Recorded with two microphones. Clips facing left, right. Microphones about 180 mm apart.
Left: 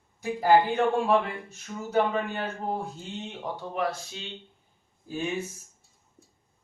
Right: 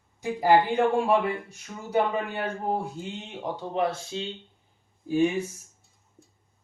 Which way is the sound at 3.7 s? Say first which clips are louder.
Right 4 dB; 25° right (ahead or behind).